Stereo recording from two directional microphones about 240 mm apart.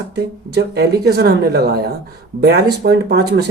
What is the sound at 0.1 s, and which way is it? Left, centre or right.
Speech, right.